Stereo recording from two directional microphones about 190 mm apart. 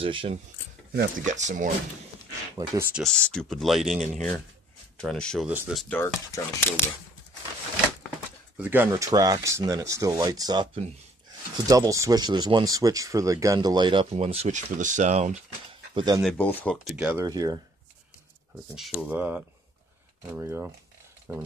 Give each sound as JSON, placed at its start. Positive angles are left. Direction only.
{"t": 0.0, "sound": "speech", "side_deg": -30}
{"t": 0.9, "sound": "speech", "side_deg": -45}
{"t": 2.5, "sound": "speech", "side_deg": -15}
{"t": 3.0, "sound": "speech", "side_deg": 0}
{"t": 5.5, "sound": "speech", "side_deg": -5}
{"t": 5.9, "sound": "speech", "side_deg": 10}
{"t": 8.5, "sound": "speech", "side_deg": -10}
{"t": 15.9, "sound": "speech", "side_deg": -25}
{"t": 16.2, "sound": "speech", "side_deg": 5}
{"t": 16.7, "sound": "speech", "side_deg": -5}
{"t": 17.2, "sound": "speech", "side_deg": -20}
{"t": 18.8, "sound": "speech", "side_deg": 0}